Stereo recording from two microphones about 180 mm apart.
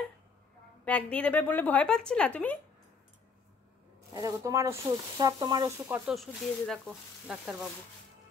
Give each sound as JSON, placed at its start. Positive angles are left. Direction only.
{"t": 0.8, "sound": "a woman's voice", "side_deg": 10}
{"t": 4.1, "sound": "speech", "side_deg": -20}
{"t": 6.0, "sound": "speech", "side_deg": 0}